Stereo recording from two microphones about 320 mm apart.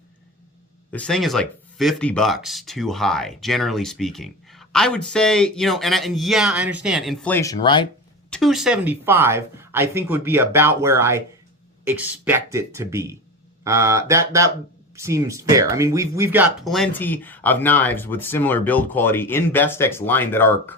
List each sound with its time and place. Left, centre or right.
0.9 s speech: centre
8.3 s speech: centre